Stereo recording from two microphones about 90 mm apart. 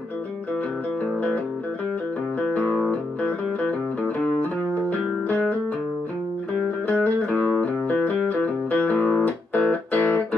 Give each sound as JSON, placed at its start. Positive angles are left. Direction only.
{"t": 2.4, "sound": "music", "side_deg": 15}
{"t": 6.9, "sound": "music", "side_deg": 15}